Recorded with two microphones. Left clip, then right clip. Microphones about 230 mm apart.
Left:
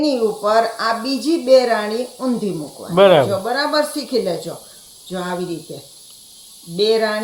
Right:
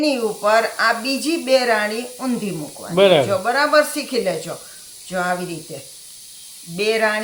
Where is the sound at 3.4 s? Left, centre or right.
Right.